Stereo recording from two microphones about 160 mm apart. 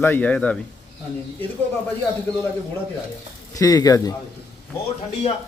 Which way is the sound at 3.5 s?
20° left (ahead or behind).